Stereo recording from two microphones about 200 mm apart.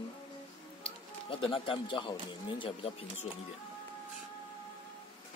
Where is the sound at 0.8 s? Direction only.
25° left (ahead or behind).